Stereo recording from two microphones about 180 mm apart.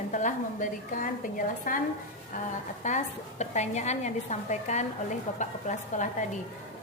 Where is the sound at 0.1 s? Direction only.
45° left (ahead or behind).